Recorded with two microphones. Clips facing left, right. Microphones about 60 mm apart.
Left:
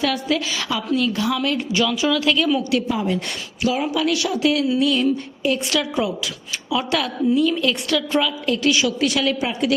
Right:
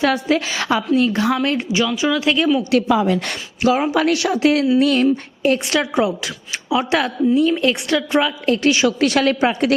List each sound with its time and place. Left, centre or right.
0.0 s a woman's voice: right
1.7 s speech: centre
2.9 s a woman's voice: right
3.6 s a woman's voice: right
5.7 s a woman's voice: right
9.0 s speech: right